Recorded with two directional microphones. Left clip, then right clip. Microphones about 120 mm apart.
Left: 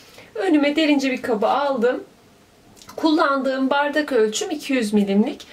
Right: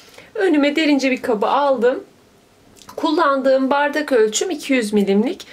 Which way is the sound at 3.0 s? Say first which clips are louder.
Right 2 dB; 30° right (ahead or behind).